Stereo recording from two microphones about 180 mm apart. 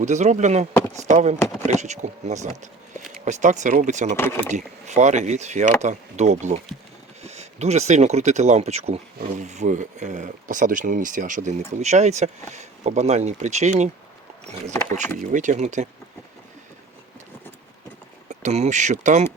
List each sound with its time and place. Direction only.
0.0 s speech: 40° right (ahead or behind)
4.2 s speech: 15° left (ahead or behind)
4.9 s speech: 40° right (ahead or behind)
15.2 s speech: 45° right (ahead or behind)
18.3 s speech: 40° right (ahead or behind)